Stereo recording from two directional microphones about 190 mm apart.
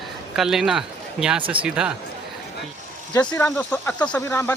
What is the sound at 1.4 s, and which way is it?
Speech, 25° right (ahead or behind).